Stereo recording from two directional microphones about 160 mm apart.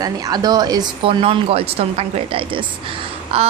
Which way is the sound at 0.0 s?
25° right (ahead or behind).